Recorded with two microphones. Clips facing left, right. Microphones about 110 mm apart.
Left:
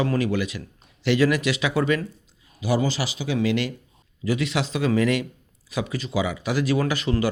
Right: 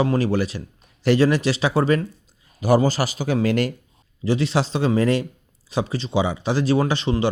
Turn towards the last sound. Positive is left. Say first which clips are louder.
# right 2 dB
turn(degrees=-25)  # may be behind; listen again after turning